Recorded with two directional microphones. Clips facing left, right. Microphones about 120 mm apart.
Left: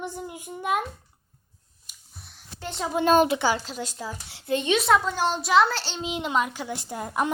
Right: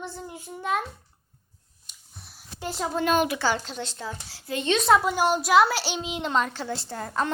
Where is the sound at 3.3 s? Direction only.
15° left (ahead or behind).